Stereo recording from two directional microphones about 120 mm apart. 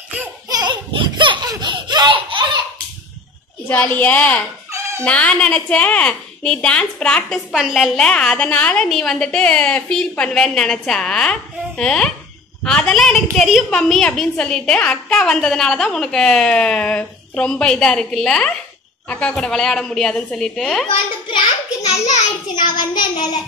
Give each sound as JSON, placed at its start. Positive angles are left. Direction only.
{"t": 0.5, "sound": "baby laughter", "side_deg": -35}
{"t": 3.6, "sound": "a woman's voice", "side_deg": 15}
{"t": 4.6, "sound": "cat", "side_deg": -25}
{"t": 5.0, "sound": "a woman's voice", "side_deg": 10}
{"t": 22.6, "sound": "child singing", "side_deg": 40}